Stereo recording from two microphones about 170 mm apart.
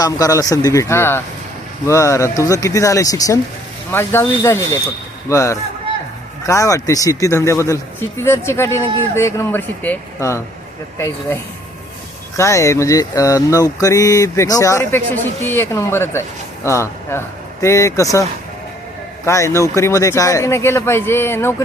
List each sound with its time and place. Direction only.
0.0 s speech: 20° left (ahead or behind)
12.4 s speech: 20° left (ahead or behind)